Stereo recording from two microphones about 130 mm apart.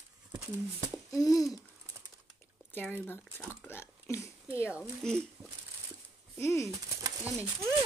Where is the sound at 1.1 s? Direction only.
25° left (ahead or behind).